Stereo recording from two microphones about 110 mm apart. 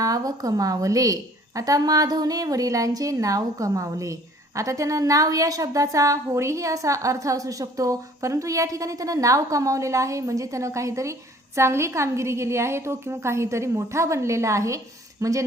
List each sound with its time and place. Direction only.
0.0 s a woman's voice: 35° right (ahead or behind)